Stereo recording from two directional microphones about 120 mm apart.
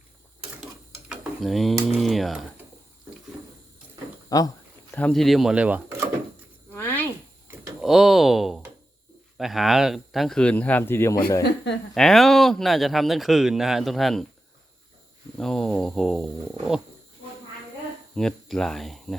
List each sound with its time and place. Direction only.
0.6 s dishes: 5° right (ahead or behind)
2.0 s speech: centre (ahead or behind)
4.3 s speech: 30° left (ahead or behind)
4.9 s speech: 15° left (ahead or behind)
5.1 s speech: centre (ahead or behind)
6.7 s a sound: 15° left (ahead or behind)
7.8 s speech: centre (ahead or behind); by 11.4 s 25° left (ahead or behind)
11.9 s speech: centre (ahead or behind)
15.4 s speech: 5° left (ahead or behind)
18.1 s speech: 5° left (ahead or behind)